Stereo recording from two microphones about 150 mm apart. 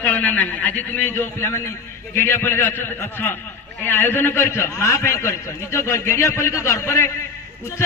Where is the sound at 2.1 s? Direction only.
15° left (ahead or behind).